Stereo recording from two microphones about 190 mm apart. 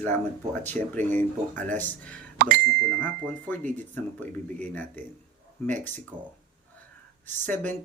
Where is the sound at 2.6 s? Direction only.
10° left (ahead or behind).